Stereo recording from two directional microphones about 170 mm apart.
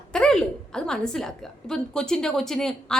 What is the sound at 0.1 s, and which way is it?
A woman's voice, 5° left (ahead or behind).